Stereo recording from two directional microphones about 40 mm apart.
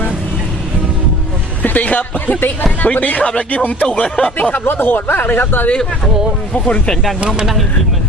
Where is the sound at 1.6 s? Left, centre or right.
Left.